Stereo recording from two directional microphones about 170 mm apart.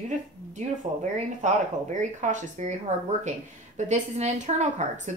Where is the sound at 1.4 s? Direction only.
45° right (ahead or behind).